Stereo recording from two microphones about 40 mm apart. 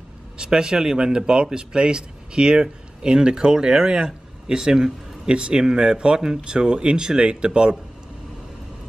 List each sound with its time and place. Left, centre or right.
0.4 s a man's voice: centre